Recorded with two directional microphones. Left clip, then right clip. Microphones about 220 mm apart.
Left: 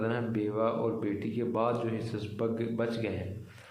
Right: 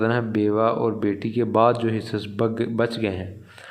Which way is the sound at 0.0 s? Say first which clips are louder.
Right 10 dB; 40° right (ahead or behind).